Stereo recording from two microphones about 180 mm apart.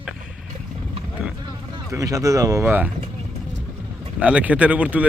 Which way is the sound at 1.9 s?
20° right (ahead or behind).